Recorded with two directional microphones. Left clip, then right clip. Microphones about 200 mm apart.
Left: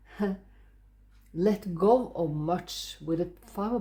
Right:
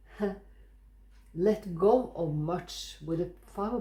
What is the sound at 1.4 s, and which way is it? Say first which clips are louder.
Speech: even; 45° left (ahead or behind).